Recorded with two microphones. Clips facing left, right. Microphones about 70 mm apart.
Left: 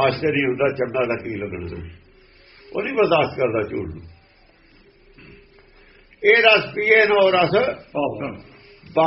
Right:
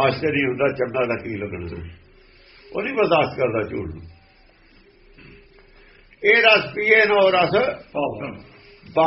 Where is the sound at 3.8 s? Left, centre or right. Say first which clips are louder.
Left 1 dB; left.